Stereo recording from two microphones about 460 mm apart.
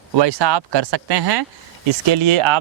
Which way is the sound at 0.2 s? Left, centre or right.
Right.